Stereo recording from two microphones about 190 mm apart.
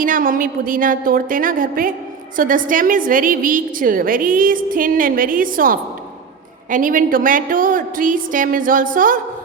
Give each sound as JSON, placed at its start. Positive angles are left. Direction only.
{"t": 0.0, "sound": "a woman's voice", "side_deg": -45}